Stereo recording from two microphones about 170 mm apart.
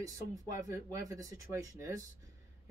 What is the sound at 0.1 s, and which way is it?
Speech, 20° right (ahead or behind).